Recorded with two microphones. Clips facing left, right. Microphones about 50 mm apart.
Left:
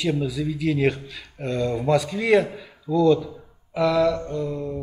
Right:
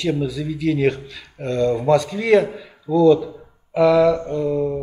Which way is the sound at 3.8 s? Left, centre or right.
Centre.